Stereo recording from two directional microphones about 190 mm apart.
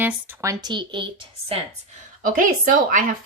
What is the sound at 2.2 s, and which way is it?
Speech, 45° right (ahead or behind).